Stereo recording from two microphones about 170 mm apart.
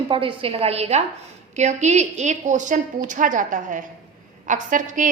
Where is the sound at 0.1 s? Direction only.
30° right (ahead or behind).